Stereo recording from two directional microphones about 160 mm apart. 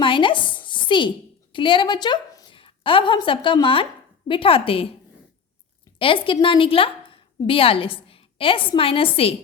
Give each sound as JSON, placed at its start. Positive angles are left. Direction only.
{"t": 0.0, "sound": "a sound", "side_deg": 30}
{"t": 1.5, "sound": "a woman's voice", "side_deg": 30}
{"t": 6.0, "sound": "a woman's voice", "side_deg": 35}